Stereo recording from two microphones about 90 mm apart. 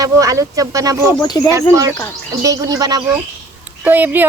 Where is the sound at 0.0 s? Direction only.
35° right (ahead or behind).